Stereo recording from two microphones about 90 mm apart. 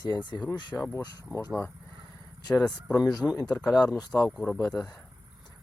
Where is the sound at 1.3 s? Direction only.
20° right (ahead or behind).